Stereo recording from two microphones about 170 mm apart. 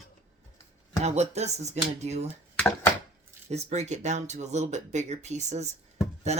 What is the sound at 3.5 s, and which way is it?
Speech, 40° right (ahead or behind).